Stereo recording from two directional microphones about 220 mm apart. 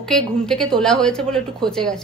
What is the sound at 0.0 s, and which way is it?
A woman's voice, centre (ahead or behind).